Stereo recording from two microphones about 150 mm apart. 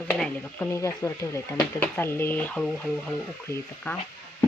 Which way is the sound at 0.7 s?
20° left (ahead or behind).